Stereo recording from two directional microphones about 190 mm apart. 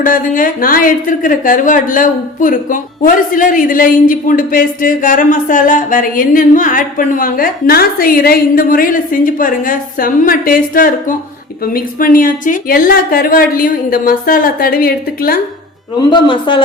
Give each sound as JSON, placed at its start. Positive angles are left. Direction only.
{"t": 0.0, "sound": "a woman's voice", "side_deg": 45}
{"t": 16.0, "sound": "speech", "side_deg": 25}